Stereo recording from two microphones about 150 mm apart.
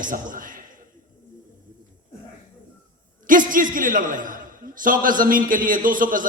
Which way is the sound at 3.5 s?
65° right (ahead or behind).